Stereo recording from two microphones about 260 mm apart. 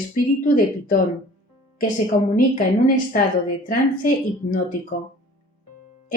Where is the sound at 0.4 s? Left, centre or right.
Left.